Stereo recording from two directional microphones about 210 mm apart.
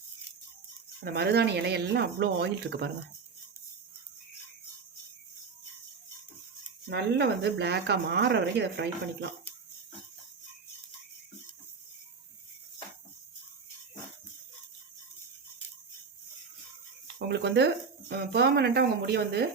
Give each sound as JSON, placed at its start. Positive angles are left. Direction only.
{"t": 0.9, "sound": "speech", "side_deg": -50}
{"t": 6.9, "sound": "speech", "side_deg": -55}
{"t": 17.2, "sound": "speech", "side_deg": -55}